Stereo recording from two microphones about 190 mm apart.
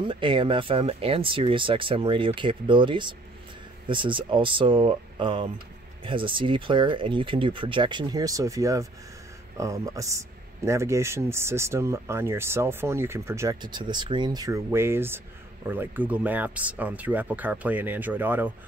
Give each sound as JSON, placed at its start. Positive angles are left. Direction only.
{"t": 0.1, "sound": "speech", "side_deg": -25}